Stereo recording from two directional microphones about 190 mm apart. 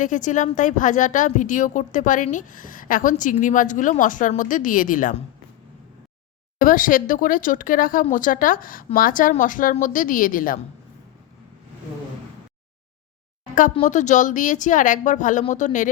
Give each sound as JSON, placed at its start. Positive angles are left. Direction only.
{"t": 0.0, "sound": "a woman's voice", "side_deg": 40}
{"t": 6.6, "sound": "a woman's voice", "side_deg": 45}
{"t": 13.8, "sound": "speech", "side_deg": 40}